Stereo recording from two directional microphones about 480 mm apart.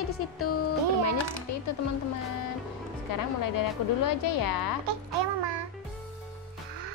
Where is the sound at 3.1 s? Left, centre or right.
Left.